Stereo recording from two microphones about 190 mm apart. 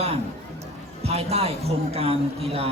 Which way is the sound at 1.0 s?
35° right (ahead or behind).